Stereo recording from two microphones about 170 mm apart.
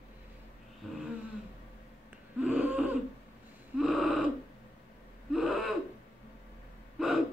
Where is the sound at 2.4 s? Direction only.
10° right (ahead or behind).